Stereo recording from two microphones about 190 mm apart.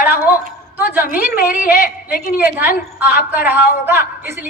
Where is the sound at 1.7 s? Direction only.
50° left (ahead or behind).